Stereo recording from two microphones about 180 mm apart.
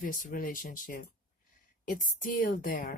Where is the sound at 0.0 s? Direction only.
50° left (ahead or behind).